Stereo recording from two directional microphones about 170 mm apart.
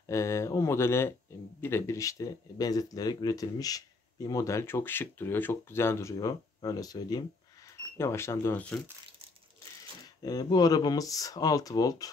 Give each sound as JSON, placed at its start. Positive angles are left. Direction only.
{"t": 0.0, "sound": "speech", "side_deg": 15}
{"t": 10.0, "sound": "speech", "side_deg": 25}